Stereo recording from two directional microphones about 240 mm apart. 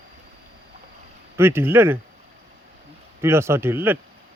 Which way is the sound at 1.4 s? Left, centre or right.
Centre.